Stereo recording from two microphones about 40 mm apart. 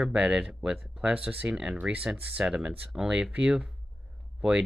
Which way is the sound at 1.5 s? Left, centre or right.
Right.